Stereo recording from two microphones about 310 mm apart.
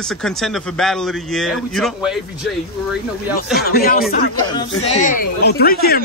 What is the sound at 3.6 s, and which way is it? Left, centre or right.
Speech, left.